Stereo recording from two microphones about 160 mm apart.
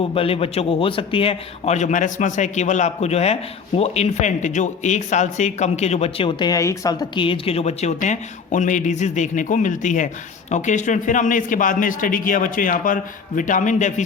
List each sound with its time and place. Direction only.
0.0 s a man's voice: 35° left (ahead or behind)